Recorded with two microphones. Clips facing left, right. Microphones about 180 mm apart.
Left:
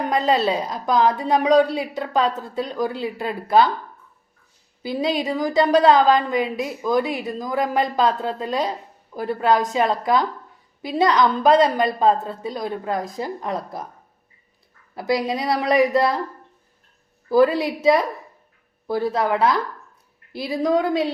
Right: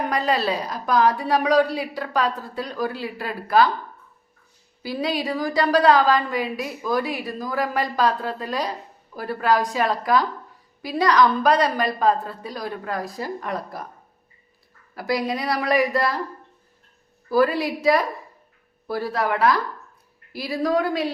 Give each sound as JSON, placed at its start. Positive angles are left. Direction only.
{"t": 0.1, "sound": "a woman's voice", "side_deg": 25}
{"t": 4.8, "sound": "a woman's voice", "side_deg": 20}
{"t": 14.9, "sound": "a woman's voice", "side_deg": 25}
{"t": 17.2, "sound": "a woman's voice", "side_deg": 20}